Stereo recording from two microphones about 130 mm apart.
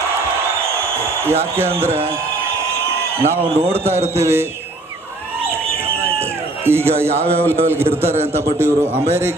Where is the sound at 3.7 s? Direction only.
15° right (ahead or behind).